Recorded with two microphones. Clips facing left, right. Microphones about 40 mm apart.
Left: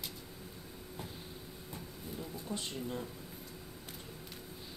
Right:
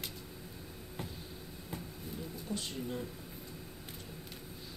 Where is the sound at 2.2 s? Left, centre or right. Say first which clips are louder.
Right 1 dB; centre.